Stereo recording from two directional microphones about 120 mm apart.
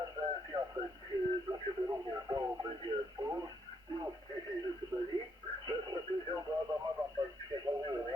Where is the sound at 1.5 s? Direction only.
30° right (ahead or behind).